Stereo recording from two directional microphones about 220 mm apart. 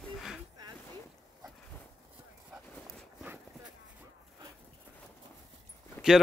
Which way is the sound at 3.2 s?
5° right (ahead or behind).